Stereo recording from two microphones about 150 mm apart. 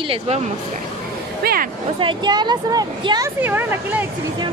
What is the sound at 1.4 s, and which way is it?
Speech, 80° right.